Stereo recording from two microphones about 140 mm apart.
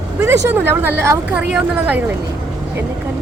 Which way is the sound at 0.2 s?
15° right (ahead or behind).